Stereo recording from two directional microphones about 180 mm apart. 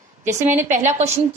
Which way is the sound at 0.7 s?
40° right (ahead or behind).